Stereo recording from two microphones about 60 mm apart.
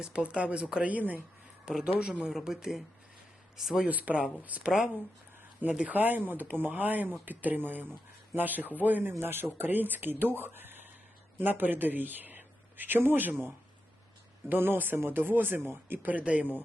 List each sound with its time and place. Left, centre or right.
0.0 s speech: centre
1.6 s speech: centre
3.8 s speech: right
9.1 s speech: right
14.5 s speech: right
16.0 s speech: right